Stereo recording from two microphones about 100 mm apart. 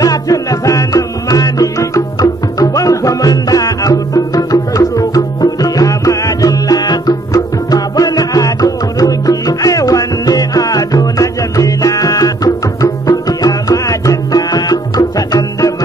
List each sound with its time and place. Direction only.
0.0 s music: 35° left (ahead or behind)